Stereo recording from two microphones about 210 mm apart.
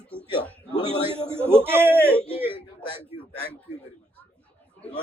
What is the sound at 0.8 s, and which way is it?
Speech, 25° right (ahead or behind).